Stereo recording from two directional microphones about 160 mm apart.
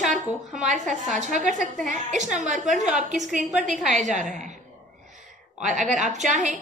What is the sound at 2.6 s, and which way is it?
Speech, centre (ahead or behind).